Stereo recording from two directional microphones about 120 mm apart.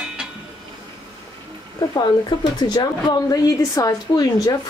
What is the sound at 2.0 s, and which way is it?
Speech, 35° left (ahead or behind).